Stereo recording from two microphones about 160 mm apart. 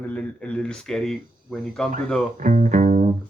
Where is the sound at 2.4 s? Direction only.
55° right (ahead or behind).